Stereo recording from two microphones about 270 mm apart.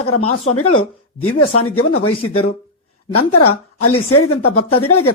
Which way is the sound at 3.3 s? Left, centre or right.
Left.